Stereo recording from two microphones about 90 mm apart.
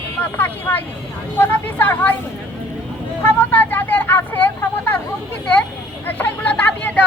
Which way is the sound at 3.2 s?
20° left (ahead or behind).